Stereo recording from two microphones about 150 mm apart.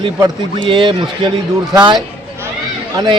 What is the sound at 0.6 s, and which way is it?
Speech, 35° right (ahead or behind).